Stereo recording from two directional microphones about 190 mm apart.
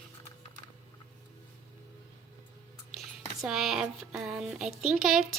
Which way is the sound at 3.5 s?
Centre (ahead or behind).